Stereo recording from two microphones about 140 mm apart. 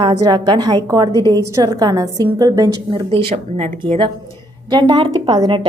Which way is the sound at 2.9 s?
40° right (ahead or behind).